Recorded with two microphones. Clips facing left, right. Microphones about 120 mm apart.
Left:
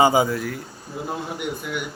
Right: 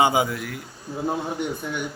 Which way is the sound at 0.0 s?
Centre (ahead or behind).